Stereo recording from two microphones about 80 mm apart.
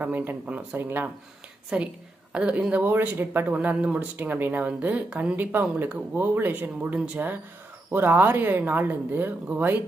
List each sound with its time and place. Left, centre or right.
0.0 s speech: right
1.7 s a woman's voice: centre